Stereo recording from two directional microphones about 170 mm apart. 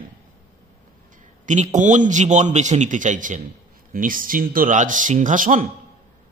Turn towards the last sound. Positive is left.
turn(degrees=-50)  # may be behind; listen again after turning